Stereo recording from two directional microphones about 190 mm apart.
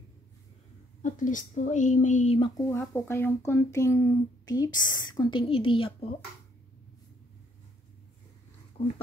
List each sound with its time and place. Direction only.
1.0 s speech: 45° left (ahead or behind); by 2.6 s 25° left (ahead or behind)
2.8 s speech: 10° left (ahead or behind); by 6.1 s 30° left (ahead or behind)